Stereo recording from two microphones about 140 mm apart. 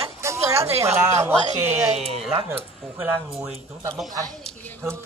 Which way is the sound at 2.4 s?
15° right (ahead or behind).